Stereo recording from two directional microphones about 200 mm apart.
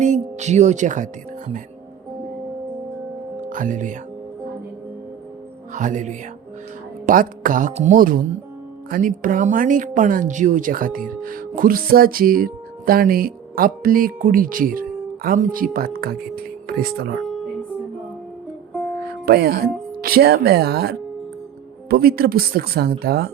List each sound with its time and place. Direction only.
0.0 s speech: 35° right (ahead or behind)
3.5 s speech: 40° right (ahead or behind)
5.7 s a woman's voice: 40° right (ahead or behind)
19.2 s a woman's voice: 50° right (ahead or behind)